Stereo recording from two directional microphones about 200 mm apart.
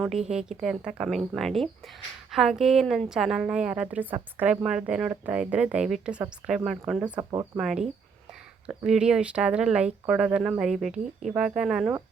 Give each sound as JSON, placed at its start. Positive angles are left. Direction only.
{"t": 0.3, "sound": "a woman's voice", "side_deg": -5}
{"t": 7.2, "sound": "speech", "side_deg": -20}
{"t": 7.5, "sound": "a woman's voice", "side_deg": -5}